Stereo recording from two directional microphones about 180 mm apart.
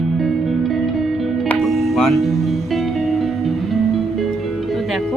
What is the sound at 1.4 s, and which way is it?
Music, centre (ahead or behind).